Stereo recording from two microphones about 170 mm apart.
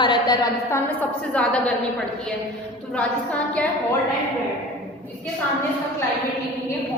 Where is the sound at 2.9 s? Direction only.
5° left (ahead or behind).